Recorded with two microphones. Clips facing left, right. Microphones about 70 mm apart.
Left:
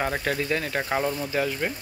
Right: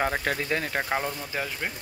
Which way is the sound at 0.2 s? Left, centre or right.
Right.